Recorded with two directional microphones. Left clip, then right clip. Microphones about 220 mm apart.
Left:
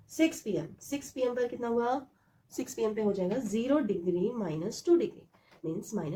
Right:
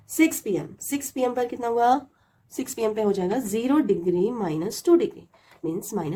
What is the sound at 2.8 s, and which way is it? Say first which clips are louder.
Speech: right 6 dB; 30° right (ahead or behind).